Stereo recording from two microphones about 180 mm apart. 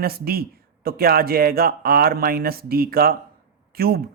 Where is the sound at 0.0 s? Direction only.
60° right (ahead or behind).